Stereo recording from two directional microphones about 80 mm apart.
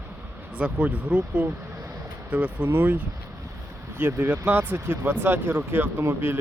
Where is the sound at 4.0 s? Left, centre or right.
Right.